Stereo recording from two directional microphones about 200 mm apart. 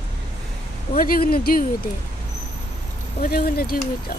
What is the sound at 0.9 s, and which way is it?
Speech, 45° left (ahead or behind).